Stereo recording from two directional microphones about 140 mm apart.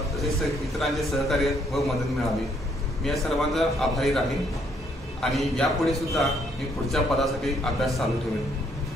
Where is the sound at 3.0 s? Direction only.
Centre (ahead or behind).